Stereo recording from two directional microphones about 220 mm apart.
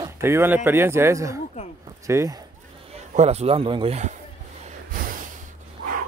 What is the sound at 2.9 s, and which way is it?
A man's voice, 30° right (ahead or behind).